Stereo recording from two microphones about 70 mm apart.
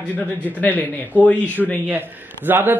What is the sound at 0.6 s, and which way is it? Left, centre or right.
Speech, left.